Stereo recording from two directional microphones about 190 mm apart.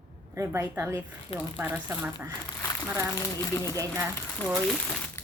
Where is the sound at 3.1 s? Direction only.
15° left (ahead or behind).